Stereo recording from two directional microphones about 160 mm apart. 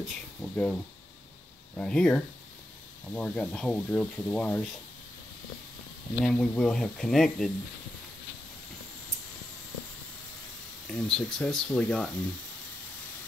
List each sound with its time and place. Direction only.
0.0 s speech: centre (ahead or behind)
1.8 s speech: 5° left (ahead or behind)
6.2 s speech: 5° left (ahead or behind)
10.9 s speech: 5° left (ahead or behind)